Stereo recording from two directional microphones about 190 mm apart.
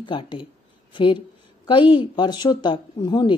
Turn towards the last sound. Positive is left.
turn(degrees=25)  # may be behind; listen again after turning